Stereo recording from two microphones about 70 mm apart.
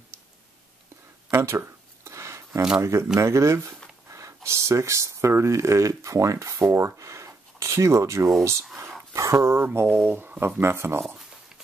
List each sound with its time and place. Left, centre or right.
1.3 s a sound: right
2.8 s speech: right
10.0 s speech: right